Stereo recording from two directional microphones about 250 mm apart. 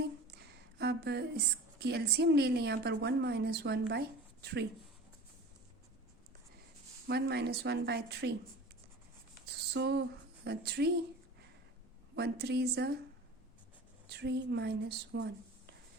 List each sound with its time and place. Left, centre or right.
0.8 s a sound: right
1.8 s a woman's voice: right
7.1 s a woman's voice: right
9.7 s a sound: right
12.1 s a woman's voice: right
14.1 s a woman's voice: right